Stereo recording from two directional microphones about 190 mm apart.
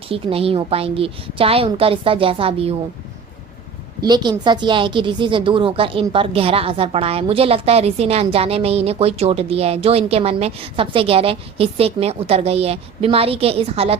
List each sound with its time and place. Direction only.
0.1 s a woman's voice: 30° right (ahead or behind)
4.0 s a woman's voice: 20° right (ahead or behind)